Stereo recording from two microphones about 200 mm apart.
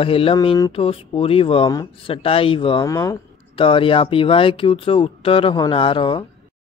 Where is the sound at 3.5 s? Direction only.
25° left (ahead or behind).